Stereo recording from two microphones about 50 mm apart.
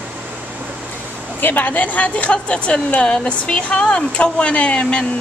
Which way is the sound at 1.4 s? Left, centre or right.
Left.